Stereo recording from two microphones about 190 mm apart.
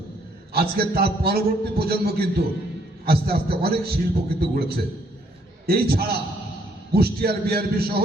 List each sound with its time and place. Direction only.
0.5 s a man's voice: 55° right (ahead or behind)